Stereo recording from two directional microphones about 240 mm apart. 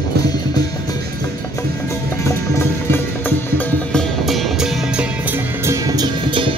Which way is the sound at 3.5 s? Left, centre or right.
Centre.